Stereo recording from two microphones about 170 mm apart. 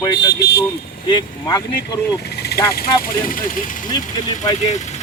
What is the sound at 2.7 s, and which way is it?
Speech, 60° left (ahead or behind).